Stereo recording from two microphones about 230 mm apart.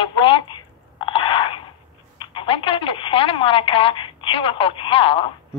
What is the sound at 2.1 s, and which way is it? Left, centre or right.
Speech, left.